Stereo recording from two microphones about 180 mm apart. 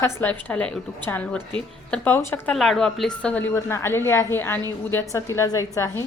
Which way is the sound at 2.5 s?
Centre (ahead or behind).